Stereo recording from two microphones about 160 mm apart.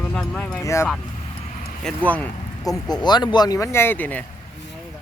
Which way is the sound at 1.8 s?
10° left (ahead or behind).